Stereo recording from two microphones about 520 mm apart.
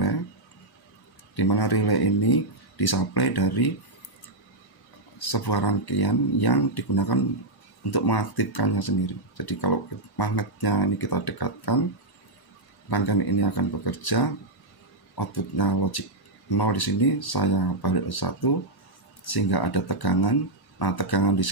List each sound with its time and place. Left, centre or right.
1.3 s speech: left
5.2 s speech: left
12.9 s speech: left